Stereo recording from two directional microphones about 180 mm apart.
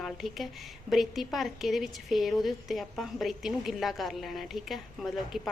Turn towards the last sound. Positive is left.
turn(degrees=0)  # may be behind; listen again after turning